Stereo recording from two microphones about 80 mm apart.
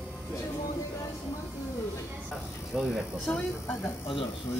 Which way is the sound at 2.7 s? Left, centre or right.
Centre.